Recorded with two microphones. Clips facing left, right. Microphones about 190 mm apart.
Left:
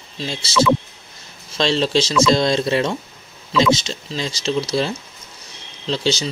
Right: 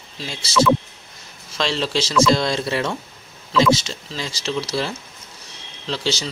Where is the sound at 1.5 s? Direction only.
25° left (ahead or behind).